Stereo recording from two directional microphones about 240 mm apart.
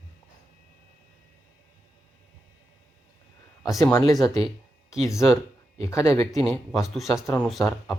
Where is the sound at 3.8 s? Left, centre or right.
Centre.